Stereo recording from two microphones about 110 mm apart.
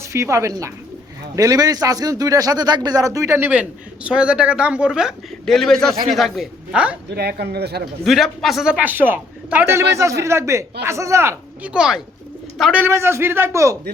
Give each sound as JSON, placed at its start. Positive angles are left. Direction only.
{"t": 0.0, "sound": "a man's voice", "side_deg": -25}
{"t": 8.0, "sound": "a man's voice", "side_deg": 0}
{"t": 9.7, "sound": "speech", "side_deg": -25}
{"t": 11.6, "sound": "a man's voice", "side_deg": -10}
{"t": 12.7, "sound": "speech", "side_deg": -20}